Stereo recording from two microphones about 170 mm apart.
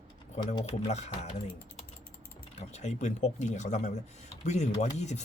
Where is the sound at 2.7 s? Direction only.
40° left (ahead or behind).